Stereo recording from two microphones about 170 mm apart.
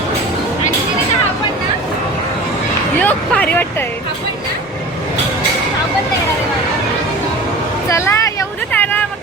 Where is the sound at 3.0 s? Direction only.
10° left (ahead or behind).